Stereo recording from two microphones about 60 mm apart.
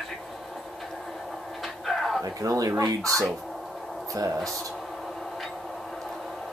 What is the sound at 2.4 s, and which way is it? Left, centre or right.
Speech, right.